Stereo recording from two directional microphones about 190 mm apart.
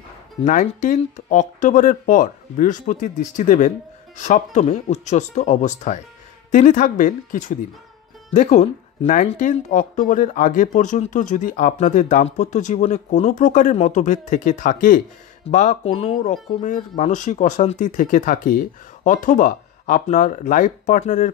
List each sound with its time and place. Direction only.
0.4 s speech: 40° left (ahead or behind)